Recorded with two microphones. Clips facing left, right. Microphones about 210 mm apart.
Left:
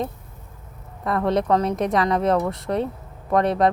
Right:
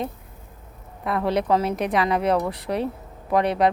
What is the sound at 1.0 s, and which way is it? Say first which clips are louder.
Speech: left 2 dB; 5° right (ahead or behind).